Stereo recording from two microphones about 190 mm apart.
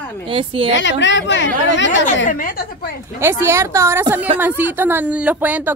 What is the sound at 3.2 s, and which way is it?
Speech, 15° right (ahead or behind).